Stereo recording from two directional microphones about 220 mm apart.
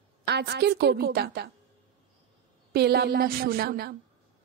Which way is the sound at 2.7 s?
45° right (ahead or behind).